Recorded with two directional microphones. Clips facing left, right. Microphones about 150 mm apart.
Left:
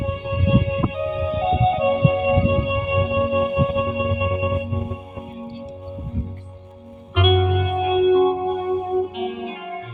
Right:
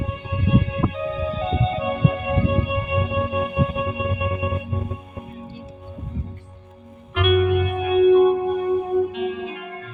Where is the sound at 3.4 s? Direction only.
25° left (ahead or behind).